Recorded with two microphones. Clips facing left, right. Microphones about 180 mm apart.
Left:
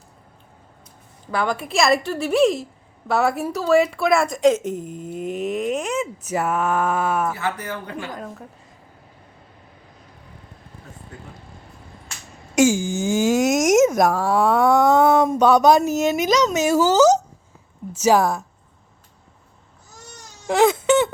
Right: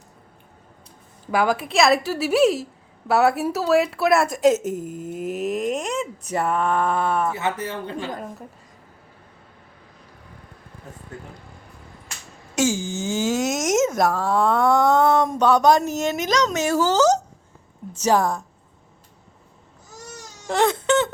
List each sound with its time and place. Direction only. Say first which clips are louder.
1.3 s speech: right 2 dB; 10° right (ahead or behind)
7.3 s speech: right 1 dB; 25° right (ahead or behind)
12.5 s speech: left 5 dB; 10° left (ahead or behind)
20.5 s baby cry: left 3 dB; 5° left (ahead or behind)